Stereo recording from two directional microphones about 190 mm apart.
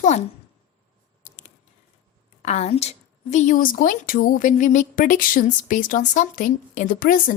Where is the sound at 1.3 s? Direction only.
40° left (ahead or behind).